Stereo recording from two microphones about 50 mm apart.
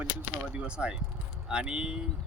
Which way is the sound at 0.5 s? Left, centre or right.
Right.